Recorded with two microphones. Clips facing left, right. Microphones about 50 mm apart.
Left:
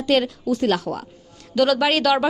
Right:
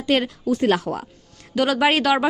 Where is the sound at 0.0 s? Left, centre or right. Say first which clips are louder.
Left 1 dB; centre.